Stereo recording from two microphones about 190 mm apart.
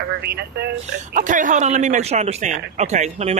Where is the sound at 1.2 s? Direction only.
45° right (ahead or behind).